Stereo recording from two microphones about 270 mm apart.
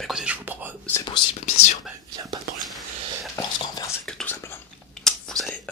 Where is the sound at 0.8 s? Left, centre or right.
Centre.